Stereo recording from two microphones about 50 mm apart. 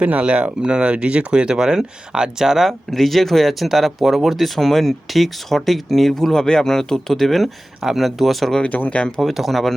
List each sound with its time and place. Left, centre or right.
0.0 s speech: right; by 8.5 s centre
8.7 s speech: left
9.0 s speech: centre
9.2 s speech: centre